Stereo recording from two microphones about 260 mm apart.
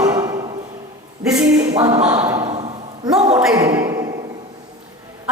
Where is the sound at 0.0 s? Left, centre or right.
Centre.